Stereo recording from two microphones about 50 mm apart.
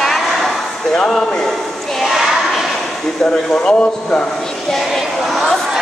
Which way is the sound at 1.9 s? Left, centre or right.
Centre.